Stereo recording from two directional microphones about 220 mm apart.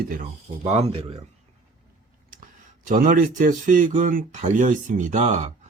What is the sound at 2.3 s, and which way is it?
Speech, 35° right (ahead or behind).